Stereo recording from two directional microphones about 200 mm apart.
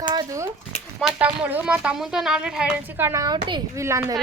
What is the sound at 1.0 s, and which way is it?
Speech, 5° right (ahead or behind).